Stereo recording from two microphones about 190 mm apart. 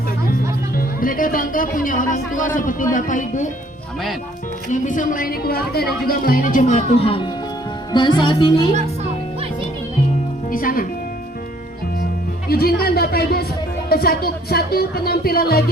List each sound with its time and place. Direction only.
0.8 s speech: 50° left (ahead or behind)
4.7 s speech: 45° left (ahead or behind)
7.9 s music: 25° left (ahead or behind)
10.5 s speech: 50° left (ahead or behind)
12.5 s speech: 50° left (ahead or behind)